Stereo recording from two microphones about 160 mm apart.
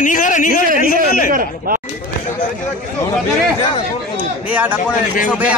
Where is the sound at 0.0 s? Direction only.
55° left (ahead or behind).